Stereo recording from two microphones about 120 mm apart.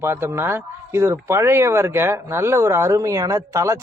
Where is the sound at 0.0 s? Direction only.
20° right (ahead or behind).